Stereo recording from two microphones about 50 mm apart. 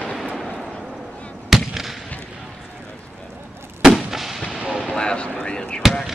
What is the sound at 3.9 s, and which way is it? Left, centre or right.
Artillery fire, centre.